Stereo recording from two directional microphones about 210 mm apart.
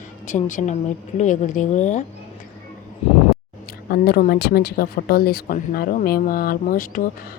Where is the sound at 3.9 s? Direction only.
45° left (ahead or behind).